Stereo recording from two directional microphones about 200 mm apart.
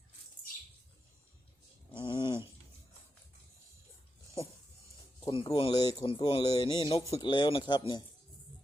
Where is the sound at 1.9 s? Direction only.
25° left (ahead or behind).